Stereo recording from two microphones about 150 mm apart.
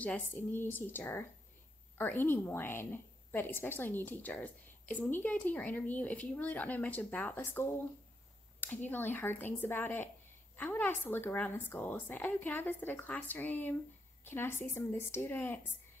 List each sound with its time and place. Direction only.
0.0 s a woman's voice: 10° left (ahead or behind)